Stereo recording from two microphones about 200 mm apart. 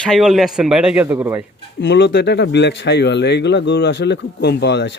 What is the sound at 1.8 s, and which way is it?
Speech, 60° left (ahead or behind).